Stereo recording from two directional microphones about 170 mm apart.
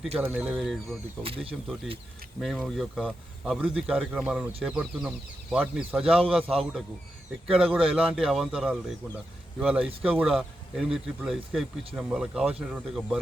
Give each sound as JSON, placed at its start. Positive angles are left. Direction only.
{"t": 0.2, "sound": "speech", "side_deg": -10}
{"t": 1.2, "sound": "speech", "side_deg": -35}
{"t": 2.4, "sound": "speech", "side_deg": 0}